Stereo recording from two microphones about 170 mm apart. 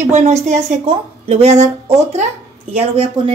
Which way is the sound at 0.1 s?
40° right (ahead or behind).